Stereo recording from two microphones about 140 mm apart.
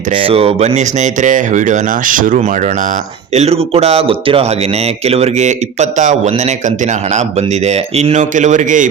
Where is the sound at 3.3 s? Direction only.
45° right (ahead or behind).